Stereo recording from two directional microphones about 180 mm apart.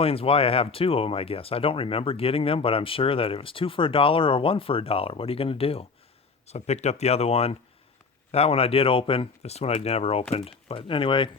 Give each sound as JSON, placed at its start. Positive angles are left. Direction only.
{"t": 0.0, "sound": "speech", "side_deg": 30}